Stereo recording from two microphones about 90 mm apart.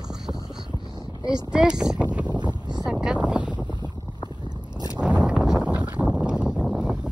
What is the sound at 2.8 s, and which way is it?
Boat, 5° right (ahead or behind).